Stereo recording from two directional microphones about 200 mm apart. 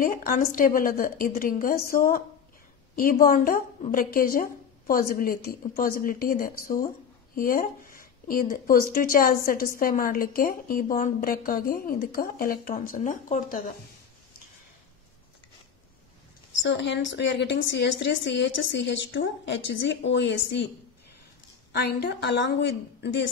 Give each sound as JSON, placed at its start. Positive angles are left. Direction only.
{"t": 0.0, "sound": "speech", "side_deg": 45}
{"t": 16.6, "sound": "a woman's voice", "side_deg": 60}
{"t": 21.7, "sound": "a woman's voice", "side_deg": 55}